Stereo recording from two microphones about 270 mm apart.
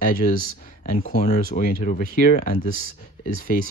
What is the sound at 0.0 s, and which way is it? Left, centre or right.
Speech, left.